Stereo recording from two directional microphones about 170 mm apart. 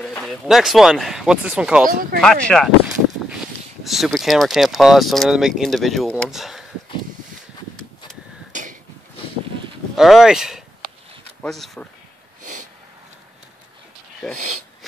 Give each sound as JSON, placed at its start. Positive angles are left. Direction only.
{"t": 0.0, "sound": "speech", "side_deg": 0}
{"t": 1.9, "sound": "speech", "side_deg": -55}
{"t": 2.2, "sound": "speech", "side_deg": 5}
{"t": 3.8, "sound": "speech", "side_deg": 0}
{"t": 8.5, "sound": "a sound", "side_deg": -50}
{"t": 9.9, "sound": "speech", "side_deg": 0}
{"t": 14.3, "sound": "speech", "side_deg": -45}